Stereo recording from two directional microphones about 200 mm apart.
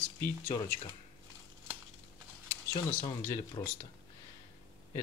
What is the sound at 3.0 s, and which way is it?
Speech, 20° left (ahead or behind).